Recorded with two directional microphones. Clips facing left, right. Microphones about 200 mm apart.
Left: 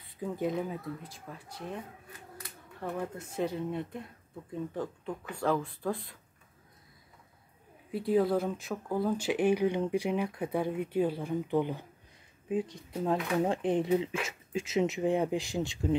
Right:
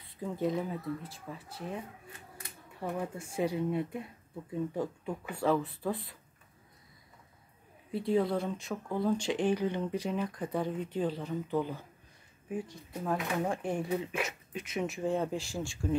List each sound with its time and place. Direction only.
0.2 s speech: centre (ahead or behind)
2.8 s speech: 10° right (ahead or behind)
7.9 s speech: centre (ahead or behind); by 16.0 s 20° left (ahead or behind)